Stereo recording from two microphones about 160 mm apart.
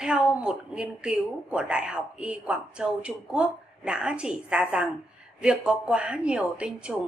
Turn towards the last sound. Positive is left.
turn(degrees=-5)  # may be behind; listen again after turning